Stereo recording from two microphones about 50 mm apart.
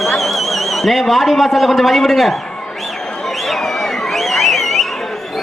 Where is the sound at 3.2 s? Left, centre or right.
Centre.